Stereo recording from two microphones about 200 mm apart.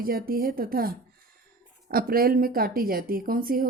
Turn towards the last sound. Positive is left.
turn(degrees=-45)  # may be behind; listen again after turning